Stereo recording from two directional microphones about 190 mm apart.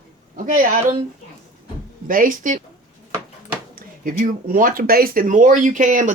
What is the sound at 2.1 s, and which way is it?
Speech, 45° right (ahead or behind).